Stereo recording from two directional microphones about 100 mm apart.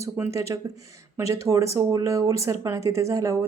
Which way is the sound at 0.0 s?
30° right (ahead or behind).